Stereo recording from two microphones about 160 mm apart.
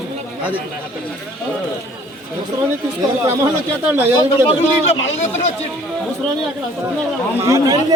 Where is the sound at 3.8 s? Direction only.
10° right (ahead or behind).